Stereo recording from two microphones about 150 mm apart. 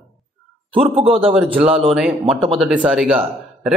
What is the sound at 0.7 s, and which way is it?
Speech, 35° right (ahead or behind).